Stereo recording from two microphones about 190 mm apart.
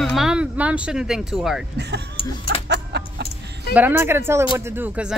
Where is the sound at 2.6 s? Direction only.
65° right (ahead or behind).